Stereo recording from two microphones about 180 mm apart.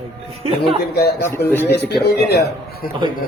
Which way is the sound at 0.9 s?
60° left (ahead or behind).